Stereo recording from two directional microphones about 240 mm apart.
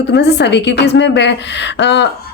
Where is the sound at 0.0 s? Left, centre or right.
Left.